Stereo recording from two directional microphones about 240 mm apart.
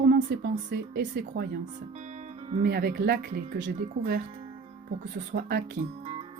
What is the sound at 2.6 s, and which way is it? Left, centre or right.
Speech, right.